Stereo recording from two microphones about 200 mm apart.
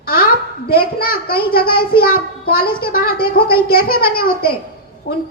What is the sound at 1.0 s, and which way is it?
A child's voice, 50° left (ahead or behind).